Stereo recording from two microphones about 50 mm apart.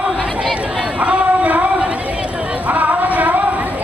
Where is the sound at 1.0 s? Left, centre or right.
Right.